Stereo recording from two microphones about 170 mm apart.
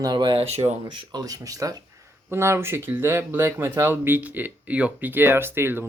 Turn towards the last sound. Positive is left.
turn(degrees=-15)  # may be behind; listen again after turning